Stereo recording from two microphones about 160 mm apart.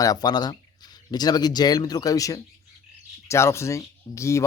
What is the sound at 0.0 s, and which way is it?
A man's voice, 25° left (ahead or behind).